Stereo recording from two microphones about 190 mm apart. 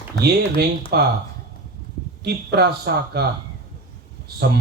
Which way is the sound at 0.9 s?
55° right (ahead or behind).